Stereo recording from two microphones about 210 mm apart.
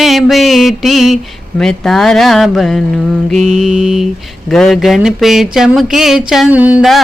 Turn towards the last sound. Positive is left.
turn(degrees=-5)  # may be behind; listen again after turning